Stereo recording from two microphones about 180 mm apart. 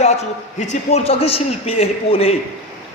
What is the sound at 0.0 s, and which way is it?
A man's voice, 40° left (ahead or behind).